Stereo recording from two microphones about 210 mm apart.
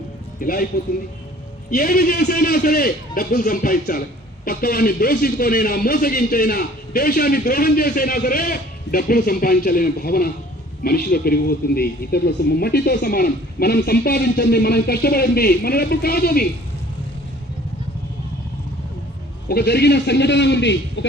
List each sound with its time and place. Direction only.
0.3 s speech: 45° left (ahead or behind)
1.7 s speech: 45° left (ahead or behind)
19.5 s speech: 50° left (ahead or behind)